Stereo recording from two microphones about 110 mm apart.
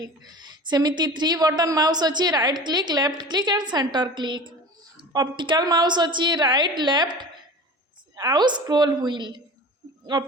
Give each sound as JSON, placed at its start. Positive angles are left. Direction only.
{"t": 0.0, "sound": "a woman's voice", "side_deg": -40}